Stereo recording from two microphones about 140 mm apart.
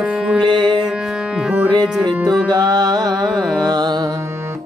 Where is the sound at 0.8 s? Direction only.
5° right (ahead or behind).